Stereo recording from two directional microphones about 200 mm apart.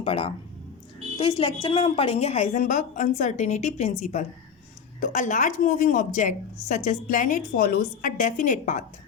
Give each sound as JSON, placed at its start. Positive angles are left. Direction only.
{"t": 0.0, "sound": "a woman's voice", "side_deg": 30}